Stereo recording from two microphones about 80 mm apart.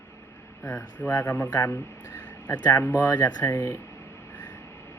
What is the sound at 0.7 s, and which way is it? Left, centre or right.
Speech, centre.